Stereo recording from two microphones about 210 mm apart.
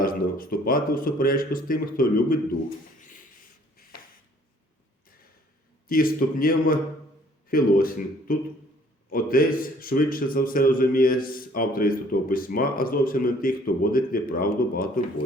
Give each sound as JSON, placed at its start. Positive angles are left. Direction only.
{"t": 0.0, "sound": "a man's voice", "side_deg": 40}
{"t": 5.9, "sound": "a man's voice", "side_deg": 45}